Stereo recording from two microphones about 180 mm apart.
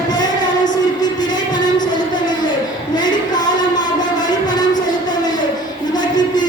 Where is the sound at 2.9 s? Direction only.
25° left (ahead or behind).